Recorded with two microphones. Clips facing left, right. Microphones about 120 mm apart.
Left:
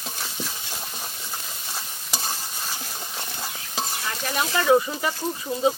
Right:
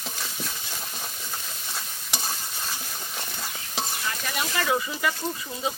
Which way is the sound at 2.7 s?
15° left (ahead or behind).